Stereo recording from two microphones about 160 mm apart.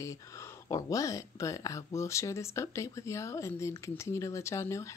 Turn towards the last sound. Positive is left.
turn(degrees=15)  # may be behind; listen again after turning